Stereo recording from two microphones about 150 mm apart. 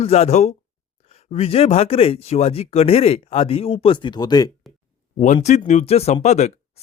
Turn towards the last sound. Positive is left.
turn(degrees=50)  # may be behind; listen again after turning